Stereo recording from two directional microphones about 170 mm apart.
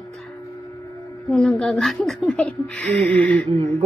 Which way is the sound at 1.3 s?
5° left (ahead or behind).